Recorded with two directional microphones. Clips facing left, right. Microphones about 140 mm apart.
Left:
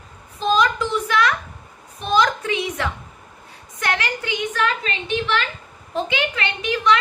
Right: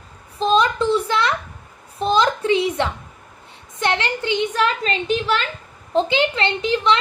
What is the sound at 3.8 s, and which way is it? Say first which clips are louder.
A woman's voice: right 3 dB; 25° right (ahead or behind).